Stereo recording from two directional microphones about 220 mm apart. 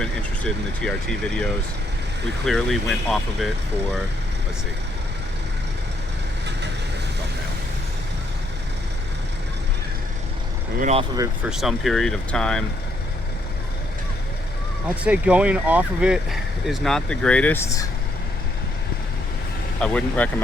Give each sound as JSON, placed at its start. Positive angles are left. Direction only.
{"t": 0.0, "sound": "speech", "side_deg": 5}
{"t": 2.5, "sound": "speech", "side_deg": 0}
{"t": 10.8, "sound": "speech", "side_deg": -30}
{"t": 11.4, "sound": "speech", "side_deg": 0}
{"t": 15.0, "sound": "speech", "side_deg": -5}
{"t": 19.8, "sound": "speech", "side_deg": 5}